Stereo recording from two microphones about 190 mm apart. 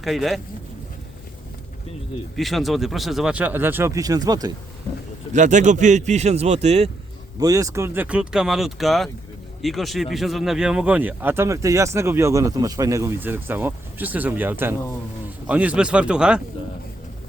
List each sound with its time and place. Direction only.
0.0 s speech: centre (ahead or behind)
2.3 s speech: centre (ahead or behind); by 4.5 s 20° right (ahead or behind)
5.3 s speech: 40° right (ahead or behind)
7.3 s speech: 20° right (ahead or behind)